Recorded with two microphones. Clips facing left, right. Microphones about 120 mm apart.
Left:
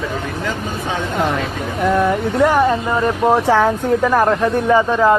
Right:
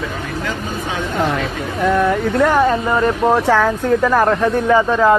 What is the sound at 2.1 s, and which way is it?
Speech, 15° left (ahead or behind).